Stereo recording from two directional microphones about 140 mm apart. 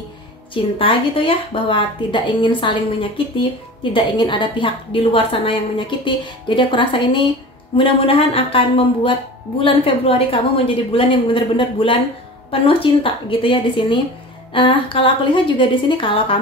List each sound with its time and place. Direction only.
0.7 s a woman's voice: 40° left (ahead or behind)